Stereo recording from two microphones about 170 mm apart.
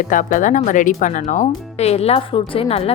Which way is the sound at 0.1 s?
50° left (ahead or behind).